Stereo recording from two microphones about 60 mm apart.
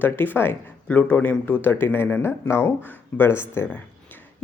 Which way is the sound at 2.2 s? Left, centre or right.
Left.